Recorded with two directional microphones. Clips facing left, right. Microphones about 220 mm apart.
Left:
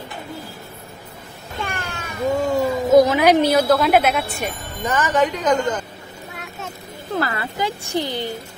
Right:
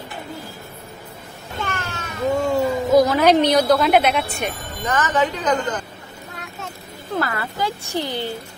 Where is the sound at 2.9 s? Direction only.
20° left (ahead or behind).